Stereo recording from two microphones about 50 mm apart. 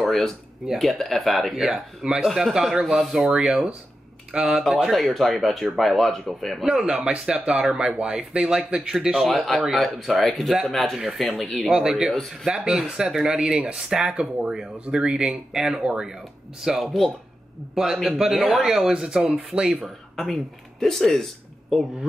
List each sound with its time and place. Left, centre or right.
0.0 s a sound: centre
0.7 s speech: centre
1.6 s speech: centre
2.2 s speech: centre
3.3 s speech: centre
7.1 s speech: right; by 11.7 s centre
11.7 s speech: centre
12.1 s speech: centre
12.4 s speech: centre
13.8 s speech: centre
16.8 s speech: centre
18.0 s speech: centre
20.2 s speech: centre